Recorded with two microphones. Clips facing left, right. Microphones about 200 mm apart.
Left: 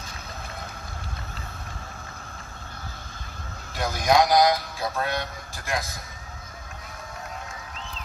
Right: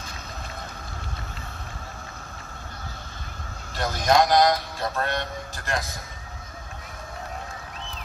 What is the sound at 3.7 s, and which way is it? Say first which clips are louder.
Speech: even; 10° left (ahead or behind).